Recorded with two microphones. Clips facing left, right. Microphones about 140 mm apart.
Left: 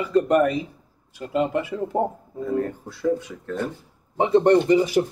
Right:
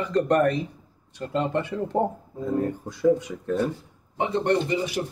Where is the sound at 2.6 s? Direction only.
15° right (ahead or behind).